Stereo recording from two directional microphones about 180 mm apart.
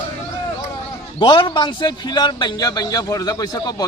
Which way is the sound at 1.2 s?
25° left (ahead or behind).